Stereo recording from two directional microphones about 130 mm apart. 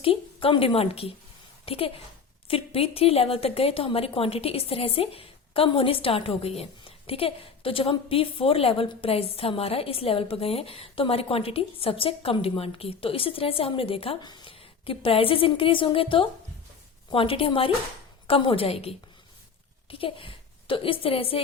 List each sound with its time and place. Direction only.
0.0 s a woman's voice: 45° left (ahead or behind)